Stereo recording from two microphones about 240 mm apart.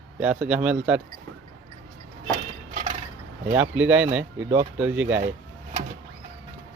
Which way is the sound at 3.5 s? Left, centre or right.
Centre.